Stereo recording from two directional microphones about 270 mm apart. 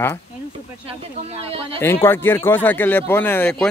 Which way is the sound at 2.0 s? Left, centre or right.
Centre.